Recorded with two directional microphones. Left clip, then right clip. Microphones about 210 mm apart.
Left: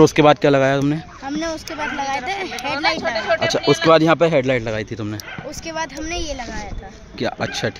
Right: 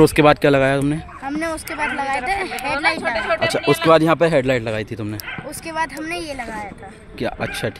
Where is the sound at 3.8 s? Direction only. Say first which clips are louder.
Even; centre (ahead or behind).